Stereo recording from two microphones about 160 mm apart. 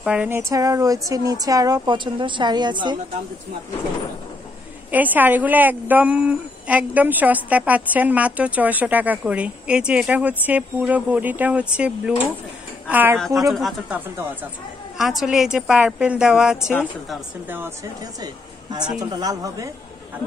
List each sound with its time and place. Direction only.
0.0 s speech: 5° right (ahead or behind); by 3.0 s 30° right (ahead or behind)
4.9 s a woman's voice: 10° right (ahead or behind)
13.5 s a woman's voice: centre (ahead or behind)
18.2 s a woman's voice: 25° right (ahead or behind)